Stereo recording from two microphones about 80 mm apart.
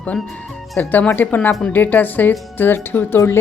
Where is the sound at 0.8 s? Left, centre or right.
Left.